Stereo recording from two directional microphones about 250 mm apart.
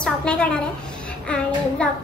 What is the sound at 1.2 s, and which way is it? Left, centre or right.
Music, centre.